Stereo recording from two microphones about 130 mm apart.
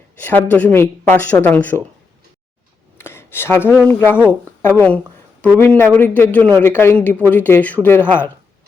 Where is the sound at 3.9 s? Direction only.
15° left (ahead or behind).